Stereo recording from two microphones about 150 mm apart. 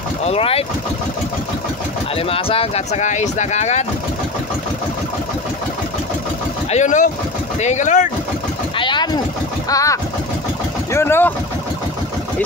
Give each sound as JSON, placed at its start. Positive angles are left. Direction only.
{"t": 0.2, "sound": "speech", "side_deg": 40}
{"t": 2.1, "sound": "speech", "side_deg": 40}
{"t": 6.7, "sound": "speech", "side_deg": 55}
{"t": 8.7, "sound": "speech", "side_deg": 30}